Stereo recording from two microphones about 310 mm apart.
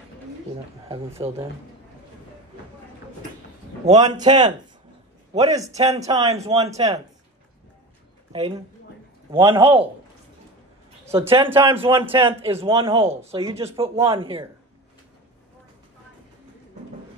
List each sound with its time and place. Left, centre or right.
0.8 s a man's voice: centre
3.8 s a man's voice: centre
8.3 s a man's voice: centre
11.1 s a man's voice: centre
13.3 s a man's voice: centre